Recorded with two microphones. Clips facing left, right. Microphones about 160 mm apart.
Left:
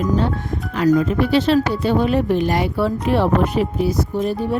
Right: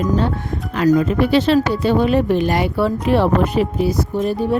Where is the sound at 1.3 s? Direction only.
85° right.